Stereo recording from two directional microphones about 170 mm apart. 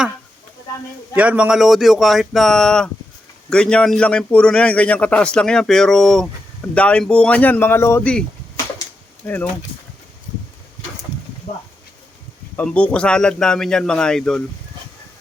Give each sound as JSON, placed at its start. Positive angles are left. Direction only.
{"t": 1.1, "sound": "a man's voice", "side_deg": -10}
{"t": 11.5, "sound": "a sound", "side_deg": 55}
{"t": 12.5, "sound": "a man's voice", "side_deg": 5}